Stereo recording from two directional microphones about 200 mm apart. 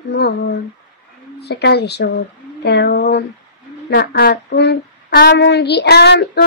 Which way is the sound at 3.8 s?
55° left (ahead or behind).